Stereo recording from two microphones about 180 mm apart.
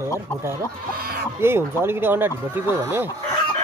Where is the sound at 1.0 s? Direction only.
55° right (ahead or behind).